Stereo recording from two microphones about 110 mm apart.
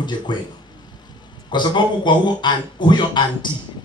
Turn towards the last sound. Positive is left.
turn(degrees=45)  # may be behind; listen again after turning